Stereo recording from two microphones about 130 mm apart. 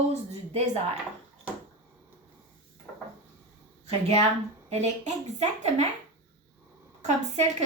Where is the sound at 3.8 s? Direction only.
50° right (ahead or behind).